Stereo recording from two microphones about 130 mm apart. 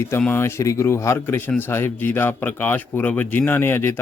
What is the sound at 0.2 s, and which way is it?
A man's voice, 15° left (ahead or behind).